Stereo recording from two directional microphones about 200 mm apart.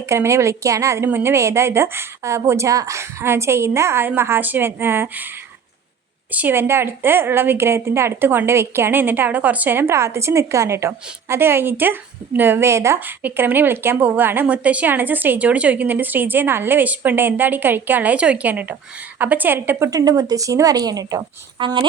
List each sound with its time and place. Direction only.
0.0 s a woman's voice: 15° right (ahead or behind)
6.3 s a woman's voice: 10° right (ahead or behind)